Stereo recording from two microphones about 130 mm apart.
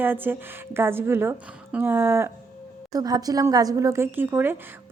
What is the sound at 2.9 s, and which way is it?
A woman's voice, 30° right (ahead or behind).